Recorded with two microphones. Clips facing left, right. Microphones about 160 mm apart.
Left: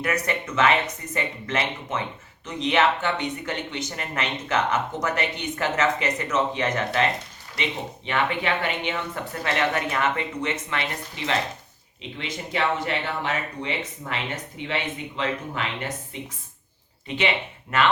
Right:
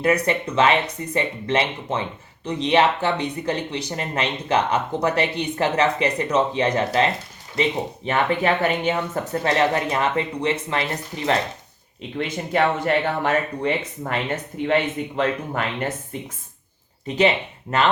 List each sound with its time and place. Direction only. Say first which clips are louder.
0.0 s speech: right 6 dB; 30° right (ahead or behind); by 16.3 s 50° right (ahead or behind)
17.2 s speech: right 6 dB; 35° right (ahead or behind)